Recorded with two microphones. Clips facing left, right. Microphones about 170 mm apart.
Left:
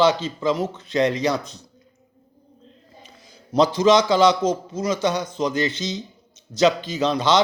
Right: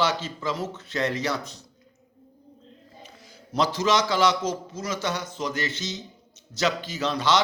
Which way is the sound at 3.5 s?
20° left (ahead or behind).